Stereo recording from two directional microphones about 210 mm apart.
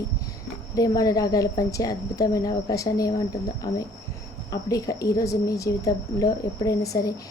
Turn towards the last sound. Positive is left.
turn(degrees=15)  # may be behind; listen again after turning